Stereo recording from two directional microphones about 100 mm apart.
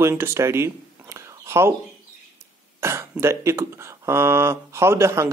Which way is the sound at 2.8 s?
25° right (ahead or behind).